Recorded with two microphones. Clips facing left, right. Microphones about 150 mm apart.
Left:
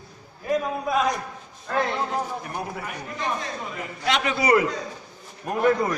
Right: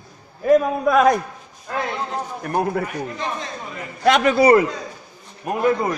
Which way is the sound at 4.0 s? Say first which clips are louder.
Right 9 dB; 50° right (ahead or behind).